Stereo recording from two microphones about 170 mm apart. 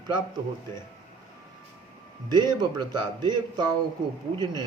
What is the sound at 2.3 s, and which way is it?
Mantra, 25° right (ahead or behind).